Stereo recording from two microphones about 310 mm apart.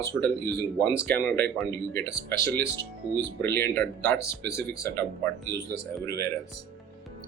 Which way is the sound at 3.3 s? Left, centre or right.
Centre.